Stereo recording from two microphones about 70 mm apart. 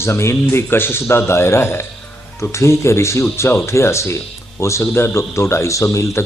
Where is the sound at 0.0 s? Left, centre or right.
Left.